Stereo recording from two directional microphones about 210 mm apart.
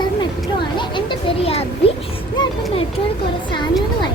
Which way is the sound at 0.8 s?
20° left (ahead or behind).